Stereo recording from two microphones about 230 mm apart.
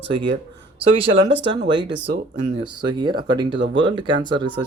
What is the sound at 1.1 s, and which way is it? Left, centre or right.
Speech, right.